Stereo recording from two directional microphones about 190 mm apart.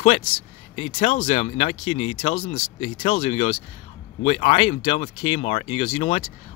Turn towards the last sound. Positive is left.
turn(degrees=30)  # may be behind; listen again after turning